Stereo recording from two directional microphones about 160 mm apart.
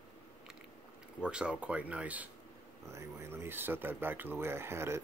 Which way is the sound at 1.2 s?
5° right (ahead or behind).